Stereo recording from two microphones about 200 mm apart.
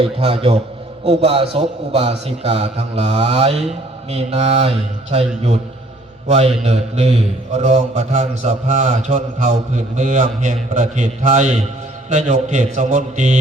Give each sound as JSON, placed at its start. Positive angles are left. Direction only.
{"t": 0.0, "sound": "a man's voice", "side_deg": -30}